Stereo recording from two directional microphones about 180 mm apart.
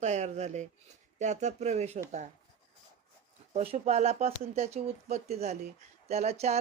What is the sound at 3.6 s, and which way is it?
Speech, 40° right (ahead or behind).